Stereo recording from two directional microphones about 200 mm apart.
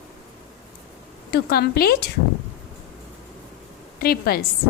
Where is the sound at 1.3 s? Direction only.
50° left (ahead or behind).